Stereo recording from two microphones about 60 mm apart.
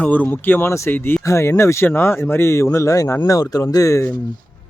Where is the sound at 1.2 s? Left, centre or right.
Left.